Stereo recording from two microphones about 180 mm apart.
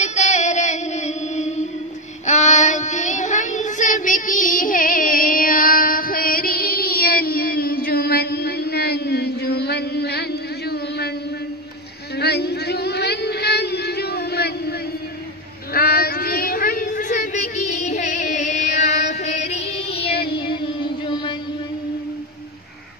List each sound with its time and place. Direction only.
0.0 s music: 40° left (ahead or behind)
2.2 s child singing: 40° left (ahead or behind); by 11.1 s 60° left (ahead or behind)
12.2 s a sound: 65° left (ahead or behind); by 18.2 s 40° left (ahead or behind)
18.3 s music: 40° left (ahead or behind)
20.0 s child singing: 60° left (ahead or behind)
20.3 s music: 25° left (ahead or behind)